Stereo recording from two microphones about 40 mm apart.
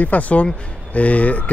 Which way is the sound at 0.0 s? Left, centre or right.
Left.